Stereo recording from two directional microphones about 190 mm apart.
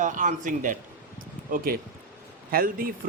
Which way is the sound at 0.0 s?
40° right (ahead or behind).